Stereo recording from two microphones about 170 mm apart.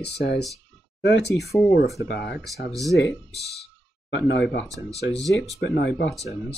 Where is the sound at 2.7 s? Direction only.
Centre (ahead or behind).